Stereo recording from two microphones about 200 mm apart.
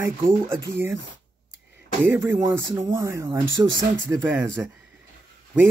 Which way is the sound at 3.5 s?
20° left (ahead or behind).